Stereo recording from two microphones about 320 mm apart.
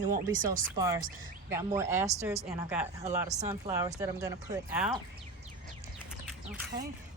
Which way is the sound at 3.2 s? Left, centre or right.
Right.